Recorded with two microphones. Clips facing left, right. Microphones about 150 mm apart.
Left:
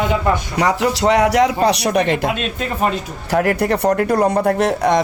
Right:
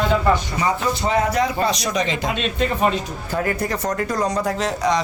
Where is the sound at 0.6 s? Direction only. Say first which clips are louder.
Left 5 dB; 75° left (ahead or behind); by 2.3 s 60° left (ahead or behind).